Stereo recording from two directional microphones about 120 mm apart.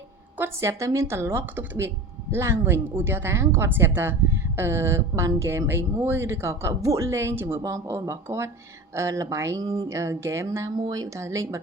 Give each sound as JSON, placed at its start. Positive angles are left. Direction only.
{"t": 0.3, "sound": "a woman's voice", "side_deg": -20}